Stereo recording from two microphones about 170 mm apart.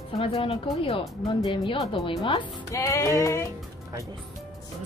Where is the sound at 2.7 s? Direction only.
20° left (ahead or behind).